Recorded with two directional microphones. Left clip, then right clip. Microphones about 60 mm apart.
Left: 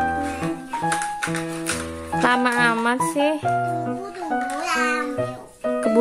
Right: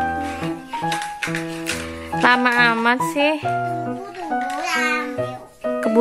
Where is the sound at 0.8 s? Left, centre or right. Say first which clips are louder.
Left 1 dB; left.